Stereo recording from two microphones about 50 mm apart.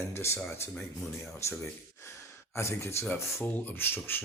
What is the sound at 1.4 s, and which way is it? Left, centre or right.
Speech, left.